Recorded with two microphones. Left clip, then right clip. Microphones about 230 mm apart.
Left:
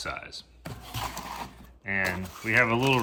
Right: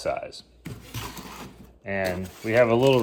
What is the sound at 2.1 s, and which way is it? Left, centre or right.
Speech, centre.